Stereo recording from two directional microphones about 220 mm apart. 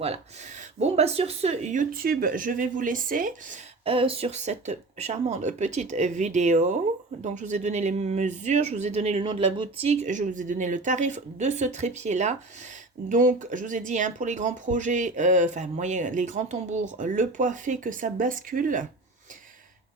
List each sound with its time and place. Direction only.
0.0 s speech: 30° right (ahead or behind)
3.8 s speech: 25° right (ahead or behind)